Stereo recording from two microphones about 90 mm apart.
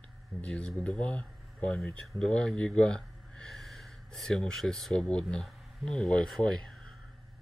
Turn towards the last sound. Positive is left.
turn(degrees=5)  # may be behind; listen again after turning